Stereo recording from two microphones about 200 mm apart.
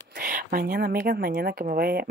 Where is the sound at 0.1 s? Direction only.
45° right (ahead or behind).